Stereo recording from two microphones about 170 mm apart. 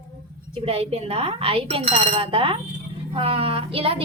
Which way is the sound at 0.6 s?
35° right (ahead or behind).